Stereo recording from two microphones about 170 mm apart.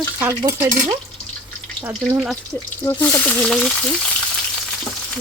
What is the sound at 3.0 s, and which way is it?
Speech, 10° left (ahead or behind).